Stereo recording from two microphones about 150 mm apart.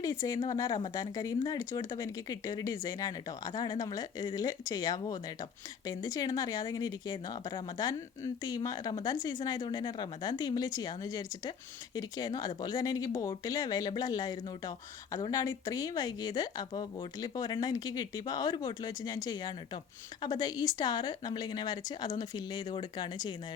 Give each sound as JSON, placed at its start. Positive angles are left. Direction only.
{"t": 0.0, "sound": "speech", "side_deg": 25}